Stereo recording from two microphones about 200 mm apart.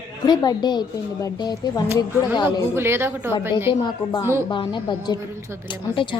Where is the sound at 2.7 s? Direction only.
10° right (ahead or behind).